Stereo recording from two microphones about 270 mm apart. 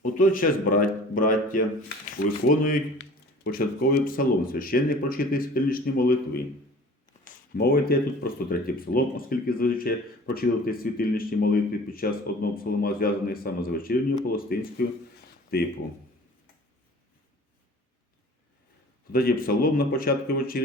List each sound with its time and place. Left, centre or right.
0.0 s speech: left
19.1 s speech: left